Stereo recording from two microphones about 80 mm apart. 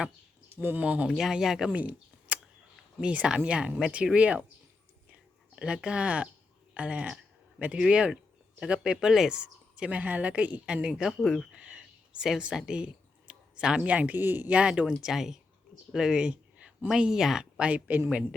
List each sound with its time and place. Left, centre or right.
0.5 s speech: right
1.0 s speech: centre
1.7 s a sound: centre
3.0 s speech: centre
5.5 s speech: centre
10.9 s speech: centre
11.5 s speech: centre
15.9 s a sound: centre
16.9 s speech: centre
18.1 s speech: centre